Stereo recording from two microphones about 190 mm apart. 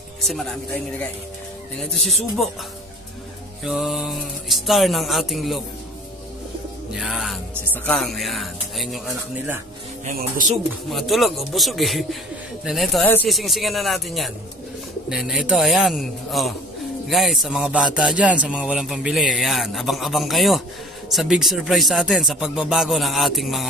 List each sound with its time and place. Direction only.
1.8 s speech: centre (ahead or behind)
3.6 s speech: centre (ahead or behind)
6.9 s speech: centre (ahead or behind)
10.0 s speech: 45° right (ahead or behind)
10.7 s speech: centre (ahead or behind)
13.0 s speech: 10° left (ahead or behind)
13.3 s speech: centre (ahead or behind)